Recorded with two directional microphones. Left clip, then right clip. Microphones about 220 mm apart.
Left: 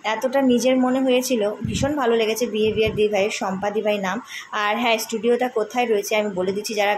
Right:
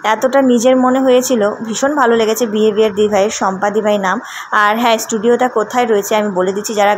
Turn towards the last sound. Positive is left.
turn(degrees=-20)  # may be behind; listen again after turning